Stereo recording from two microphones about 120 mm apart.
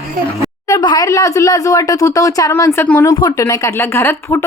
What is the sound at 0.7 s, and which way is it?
Speech, 35° left (ahead or behind).